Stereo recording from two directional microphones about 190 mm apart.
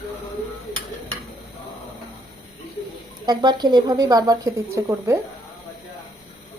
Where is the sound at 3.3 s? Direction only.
25° right (ahead or behind).